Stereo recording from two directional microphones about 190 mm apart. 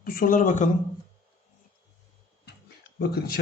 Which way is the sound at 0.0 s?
50° left (ahead or behind).